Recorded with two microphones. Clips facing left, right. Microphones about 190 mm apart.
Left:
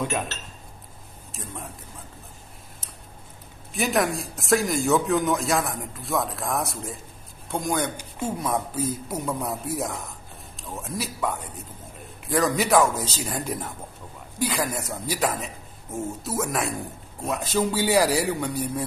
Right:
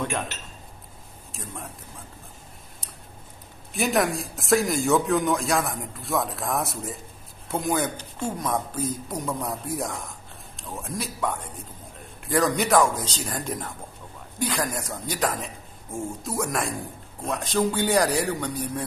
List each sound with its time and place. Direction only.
0.3 s speech: 15° right (ahead or behind)
1.3 s speech: centre (ahead or behind)
3.7 s speech: centre (ahead or behind)
7.9 s speech: 10° left (ahead or behind)